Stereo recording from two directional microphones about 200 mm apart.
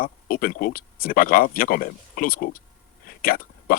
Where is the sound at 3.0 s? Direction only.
45° left (ahead or behind).